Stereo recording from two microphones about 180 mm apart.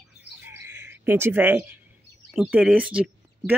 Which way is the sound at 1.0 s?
10° right (ahead or behind).